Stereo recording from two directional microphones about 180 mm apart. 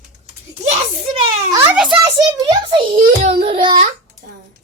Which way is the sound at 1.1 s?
30° right (ahead or behind).